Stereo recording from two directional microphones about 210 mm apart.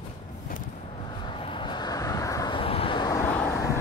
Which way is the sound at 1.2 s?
25° left (ahead or behind).